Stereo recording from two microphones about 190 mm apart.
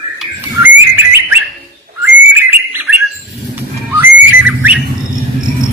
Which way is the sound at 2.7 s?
10° right (ahead or behind).